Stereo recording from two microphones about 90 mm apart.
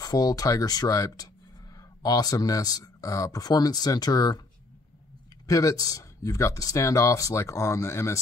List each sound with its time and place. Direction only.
0.0 s speech: 45° left (ahead or behind)
5.5 s speech: 40° left (ahead or behind)